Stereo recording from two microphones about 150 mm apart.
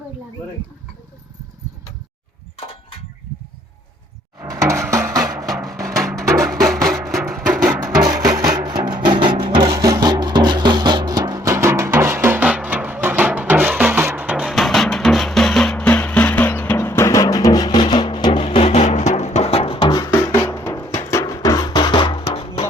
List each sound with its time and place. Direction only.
4.4 s music: 20° right (ahead or behind)
7.1 s music: centre (ahead or behind)
7.8 s music: 20° right (ahead or behind); by 18.3 s 30° left (ahead or behind)
18.3 s music: 45° left (ahead or behind)
20.1 s music: 20° left (ahead or behind); by 22.6 s 40° left (ahead or behind)